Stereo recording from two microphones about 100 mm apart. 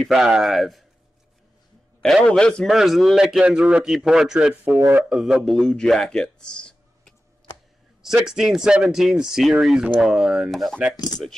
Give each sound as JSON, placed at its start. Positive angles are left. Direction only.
{"t": 0.0, "sound": "speech", "side_deg": -5}
{"t": 2.2, "sound": "a man's voice", "side_deg": 10}
{"t": 4.7, "sound": "speech", "side_deg": -25}
{"t": 5.1, "sound": "speech", "side_deg": -5}
{"t": 8.0, "sound": "speech", "side_deg": -5}